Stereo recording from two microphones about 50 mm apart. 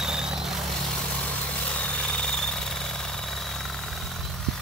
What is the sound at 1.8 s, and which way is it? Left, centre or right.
Jackhammer, centre.